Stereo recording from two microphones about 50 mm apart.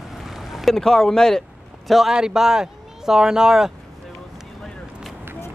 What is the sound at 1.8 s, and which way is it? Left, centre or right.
Speech, centre.